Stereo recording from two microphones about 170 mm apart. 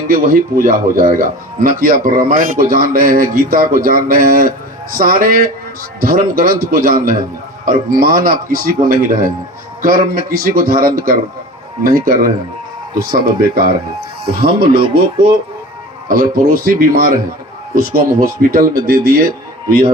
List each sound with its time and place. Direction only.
0.1 s speech: 55° right (ahead or behind)
16.0 s speech: 60° right (ahead or behind)